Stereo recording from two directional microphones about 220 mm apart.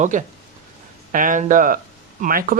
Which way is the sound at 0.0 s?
35° right (ahead or behind).